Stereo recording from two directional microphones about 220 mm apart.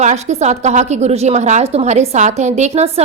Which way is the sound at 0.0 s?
30° right (ahead or behind).